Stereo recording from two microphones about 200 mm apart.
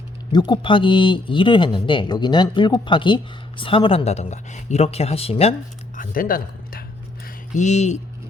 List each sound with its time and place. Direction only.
0.3 s speech: 20° left (ahead or behind)
6.0 s speech: 45° left (ahead or behind)